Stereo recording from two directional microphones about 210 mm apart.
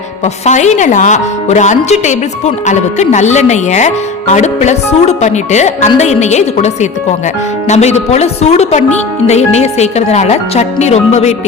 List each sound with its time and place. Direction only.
0.4 s speech: 35° left (ahead or behind)
7.7 s speech: 30° left (ahead or behind)